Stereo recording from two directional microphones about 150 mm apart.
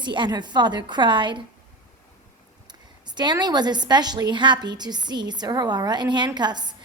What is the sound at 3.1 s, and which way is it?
A woman's voice, 30° right (ahead or behind).